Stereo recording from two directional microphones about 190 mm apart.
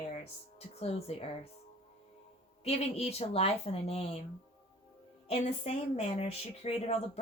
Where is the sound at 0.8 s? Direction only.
30° left (ahead or behind).